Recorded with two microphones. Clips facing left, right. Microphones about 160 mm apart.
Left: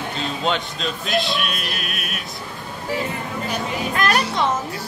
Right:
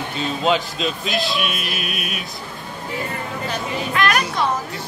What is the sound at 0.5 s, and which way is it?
Speech, centre (ahead or behind).